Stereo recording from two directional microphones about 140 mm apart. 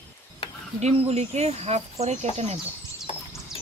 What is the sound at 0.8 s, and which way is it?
Speech, 45° right (ahead or behind).